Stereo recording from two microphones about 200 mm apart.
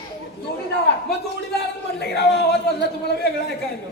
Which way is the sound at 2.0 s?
55° left (ahead or behind).